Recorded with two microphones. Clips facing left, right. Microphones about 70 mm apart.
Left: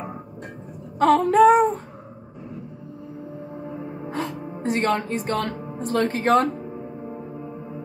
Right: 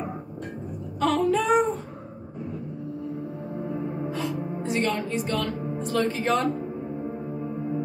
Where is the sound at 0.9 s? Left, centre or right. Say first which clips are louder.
Left 6 dB; left.